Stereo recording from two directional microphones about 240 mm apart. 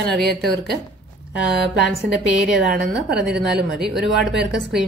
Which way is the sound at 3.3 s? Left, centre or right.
Right.